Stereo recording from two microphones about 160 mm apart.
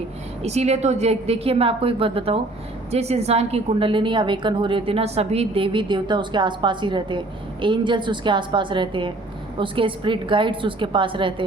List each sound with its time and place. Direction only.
0.4 s a woman's voice: 45° right (ahead or behind)